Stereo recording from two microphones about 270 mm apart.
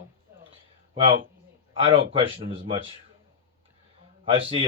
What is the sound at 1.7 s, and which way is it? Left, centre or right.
Speech, centre.